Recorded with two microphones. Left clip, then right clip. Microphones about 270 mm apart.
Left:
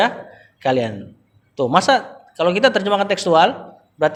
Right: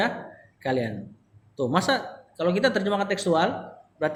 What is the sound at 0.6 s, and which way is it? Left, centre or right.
Speech, left.